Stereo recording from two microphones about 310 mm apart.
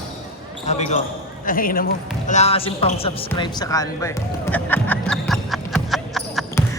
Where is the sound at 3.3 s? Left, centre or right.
Centre.